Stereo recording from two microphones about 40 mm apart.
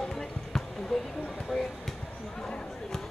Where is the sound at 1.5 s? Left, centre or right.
Centre.